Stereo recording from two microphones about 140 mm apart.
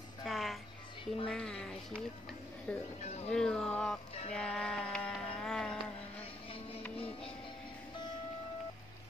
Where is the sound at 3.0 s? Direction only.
50° left (ahead or behind).